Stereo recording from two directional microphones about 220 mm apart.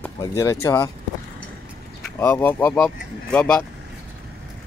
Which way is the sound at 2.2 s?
10° left (ahead or behind).